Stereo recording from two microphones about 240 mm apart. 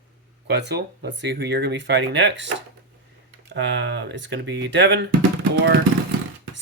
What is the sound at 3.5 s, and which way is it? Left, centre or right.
Speech, right.